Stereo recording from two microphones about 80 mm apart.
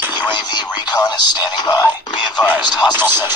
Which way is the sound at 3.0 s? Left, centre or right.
Right.